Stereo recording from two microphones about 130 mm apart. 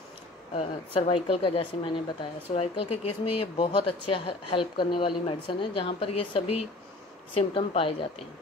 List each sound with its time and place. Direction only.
0.6 s speech: 45° left (ahead or behind)